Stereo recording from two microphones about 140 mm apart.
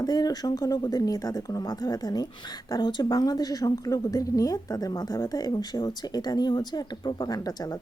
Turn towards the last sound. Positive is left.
turn(degrees=30)  # may be behind; listen again after turning